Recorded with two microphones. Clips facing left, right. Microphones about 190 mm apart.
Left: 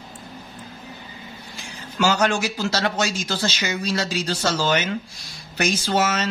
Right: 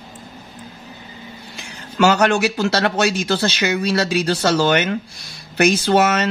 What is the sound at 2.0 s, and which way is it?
Speech, 65° right (ahead or behind).